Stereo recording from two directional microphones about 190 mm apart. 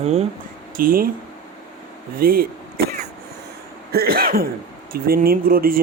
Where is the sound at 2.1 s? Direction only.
50° right (ahead or behind).